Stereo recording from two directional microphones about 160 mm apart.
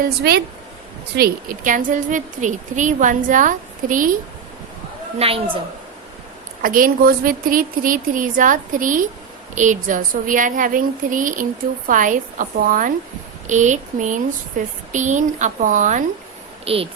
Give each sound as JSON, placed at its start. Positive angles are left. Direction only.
{"t": 0.2, "sound": "a woman's voice", "side_deg": -85}
{"t": 1.1, "sound": "a woman's voice", "side_deg": -70}
{"t": 5.2, "sound": "speech", "side_deg": -40}
{"t": 6.6, "sound": "a woman's voice", "side_deg": -60}
{"t": 16.6, "sound": "speech", "side_deg": -35}